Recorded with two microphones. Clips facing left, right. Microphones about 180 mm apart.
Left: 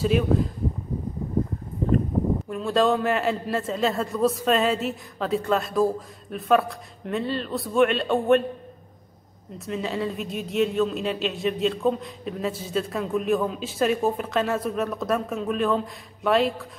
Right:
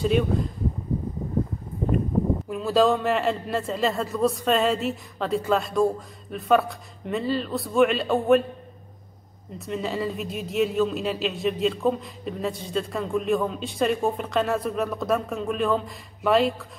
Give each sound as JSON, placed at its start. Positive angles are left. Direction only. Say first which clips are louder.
{"t": 0.0, "sound": "speech", "louder": "left 1 dB", "side_deg": 0}
{"t": 2.5, "sound": "speech", "louder": "right 1 dB", "side_deg": 0}
{"t": 9.7, "sound": "speech", "louder": "even", "side_deg": 0}